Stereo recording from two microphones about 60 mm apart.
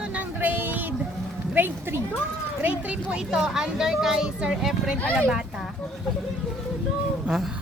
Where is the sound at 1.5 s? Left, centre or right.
Right.